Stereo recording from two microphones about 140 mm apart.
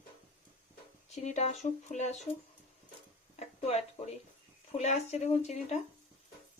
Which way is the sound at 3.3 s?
50° left (ahead or behind).